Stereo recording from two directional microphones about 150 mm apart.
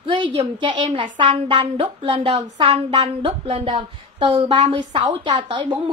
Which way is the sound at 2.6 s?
35° right (ahead or behind).